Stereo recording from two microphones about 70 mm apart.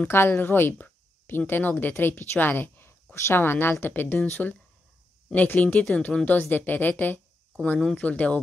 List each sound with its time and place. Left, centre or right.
0.1 s a woman's voice: left
5.3 s speech: left